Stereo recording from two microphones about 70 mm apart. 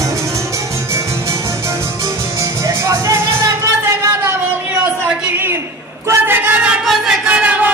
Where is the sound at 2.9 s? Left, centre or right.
Right.